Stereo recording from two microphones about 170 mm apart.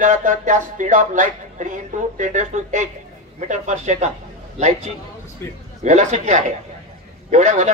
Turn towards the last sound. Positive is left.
turn(degrees=-45)  # may be behind; listen again after turning